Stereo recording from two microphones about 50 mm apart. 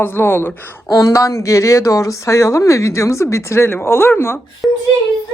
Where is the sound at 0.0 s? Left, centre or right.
Left.